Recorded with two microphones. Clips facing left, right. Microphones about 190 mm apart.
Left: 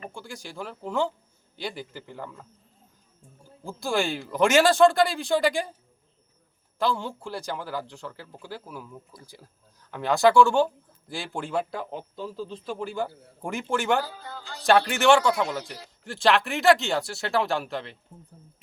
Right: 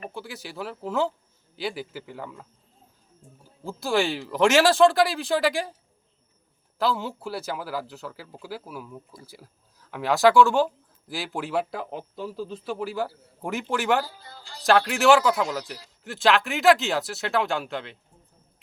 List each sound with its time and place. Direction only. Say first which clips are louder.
0.1 s speech: right 2 dB; 5° right (ahead or behind)
3.6 s speech: right 2 dB; centre (ahead or behind)
6.7 s speech: right 1 dB; 5° right (ahead or behind)
14.1 s speech: left 6 dB; 55° left (ahead or behind)
14.6 s speech: even; centre (ahead or behind)